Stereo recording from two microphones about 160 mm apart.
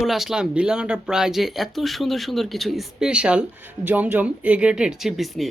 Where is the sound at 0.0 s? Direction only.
Centre (ahead or behind).